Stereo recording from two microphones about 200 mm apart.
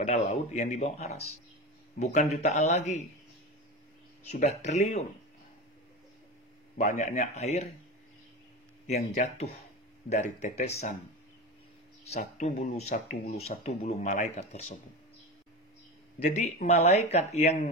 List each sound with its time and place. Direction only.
0.0 s speech: 30° left (ahead or behind)
4.3 s speech: 35° left (ahead or behind)
6.8 s speech: 35° left (ahead or behind)
8.8 s speech: 35° left (ahead or behind)
12.0 s speech: 35° left (ahead or behind)
16.2 s speech: 35° left (ahead or behind)